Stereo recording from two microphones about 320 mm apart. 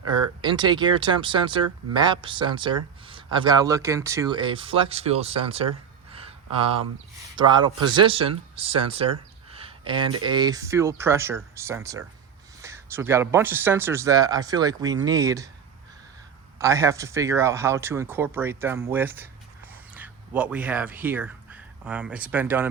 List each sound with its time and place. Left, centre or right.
0.1 s speech: centre
6.1 s a sound: centre
7.3 s speech: centre
9.5 s a sound: centre
10.2 s speech: centre
16.6 s speech: centre